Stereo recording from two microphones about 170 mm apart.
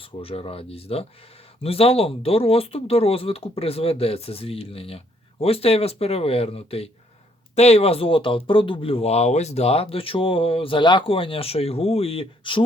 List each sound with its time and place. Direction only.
0.2 s speech: 35° left (ahead or behind)